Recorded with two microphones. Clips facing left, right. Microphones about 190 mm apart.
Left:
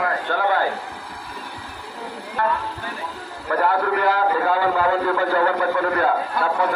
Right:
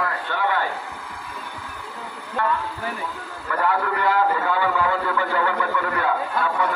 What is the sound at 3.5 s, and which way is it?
A man's voice, 40° left (ahead or behind).